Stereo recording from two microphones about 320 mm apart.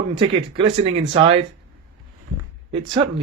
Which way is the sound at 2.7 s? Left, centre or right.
Centre.